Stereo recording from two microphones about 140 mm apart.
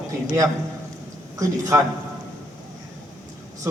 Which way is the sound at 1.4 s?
25° right (ahead or behind).